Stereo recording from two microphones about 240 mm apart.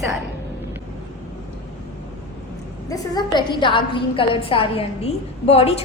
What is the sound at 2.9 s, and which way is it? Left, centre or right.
A woman's voice, centre.